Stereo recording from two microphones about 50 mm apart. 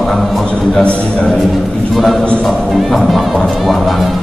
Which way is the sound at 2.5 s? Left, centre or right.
Centre.